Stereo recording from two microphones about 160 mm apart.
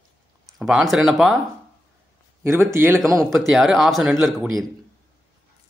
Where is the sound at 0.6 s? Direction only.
5° right (ahead or behind).